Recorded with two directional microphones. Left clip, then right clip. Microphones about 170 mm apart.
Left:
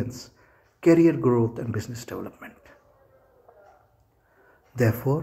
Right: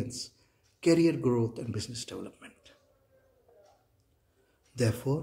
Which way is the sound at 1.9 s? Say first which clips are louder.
Left 5 dB; 25° right (ahead or behind).